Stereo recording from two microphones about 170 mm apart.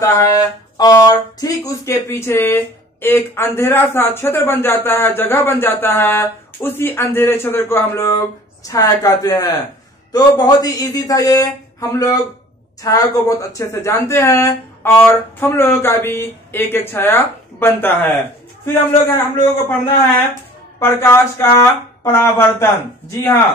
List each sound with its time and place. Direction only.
0.0 s speech: 20° left (ahead or behind)
20.8 s speech: 15° left (ahead or behind)